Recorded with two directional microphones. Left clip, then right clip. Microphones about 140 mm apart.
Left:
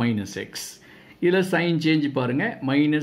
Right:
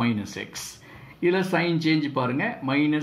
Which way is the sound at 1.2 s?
45° left (ahead or behind).